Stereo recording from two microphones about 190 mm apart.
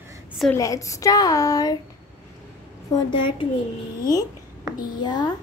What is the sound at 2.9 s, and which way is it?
Speech, 30° left (ahead or behind).